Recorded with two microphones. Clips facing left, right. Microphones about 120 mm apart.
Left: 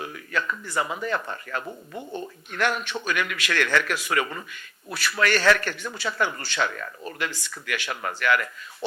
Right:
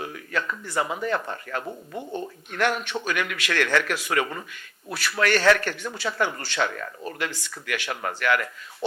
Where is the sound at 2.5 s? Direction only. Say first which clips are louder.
Right 1 dB; 40° right (ahead or behind).